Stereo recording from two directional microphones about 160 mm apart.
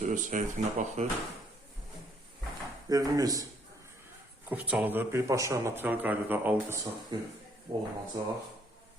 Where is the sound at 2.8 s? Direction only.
25° right (ahead or behind).